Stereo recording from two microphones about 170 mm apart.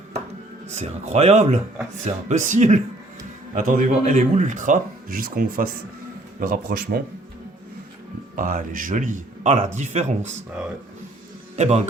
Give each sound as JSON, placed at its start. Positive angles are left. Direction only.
{"t": 0.7, "sound": "a man's voice", "side_deg": -40}
{"t": 3.5, "sound": "a man's voice", "side_deg": -55}
{"t": 8.4, "sound": "a man's voice", "side_deg": -55}
{"t": 11.5, "sound": "a man's voice", "side_deg": -40}